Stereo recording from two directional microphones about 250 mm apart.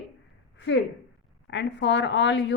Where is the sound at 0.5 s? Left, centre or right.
Left.